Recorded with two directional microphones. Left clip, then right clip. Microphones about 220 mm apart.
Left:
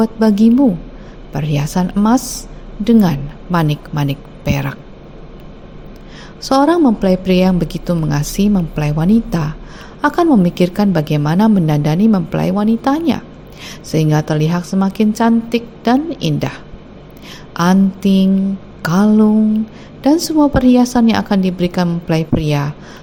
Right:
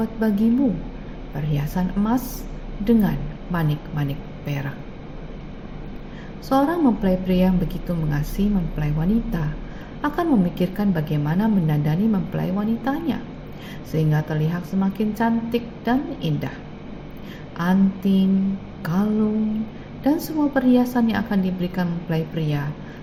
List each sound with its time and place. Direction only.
0.0 s a woman's voice: 45° left (ahead or behind)
6.5 s a woman's voice: 45° left (ahead or behind)
17.6 s a woman's voice: 45° left (ahead or behind)